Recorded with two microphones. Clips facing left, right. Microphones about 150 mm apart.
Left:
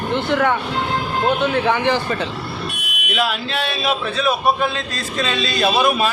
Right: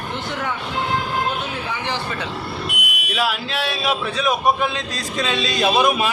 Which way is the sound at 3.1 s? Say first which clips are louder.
Left 1 dB; 10° right (ahead or behind).